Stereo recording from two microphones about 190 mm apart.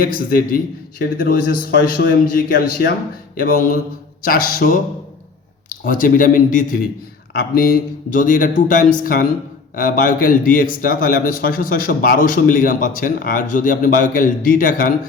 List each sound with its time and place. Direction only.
0.0 s a man's voice: 50° left (ahead or behind)